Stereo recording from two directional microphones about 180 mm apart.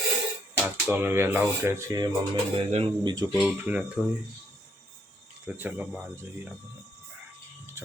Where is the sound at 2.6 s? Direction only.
35° right (ahead or behind).